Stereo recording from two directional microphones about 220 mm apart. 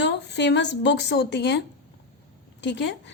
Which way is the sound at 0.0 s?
50° left (ahead or behind).